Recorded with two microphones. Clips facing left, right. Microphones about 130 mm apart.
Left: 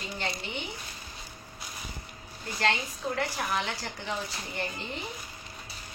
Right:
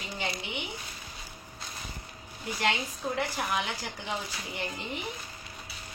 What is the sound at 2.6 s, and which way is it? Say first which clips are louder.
A woman's voice: left 1 dB; 15° right (ahead or behind).